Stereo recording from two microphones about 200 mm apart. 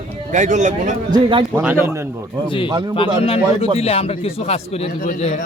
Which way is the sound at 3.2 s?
30° left (ahead or behind).